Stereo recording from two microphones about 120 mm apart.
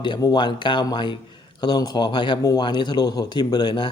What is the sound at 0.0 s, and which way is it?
Speech, 35° left (ahead or behind).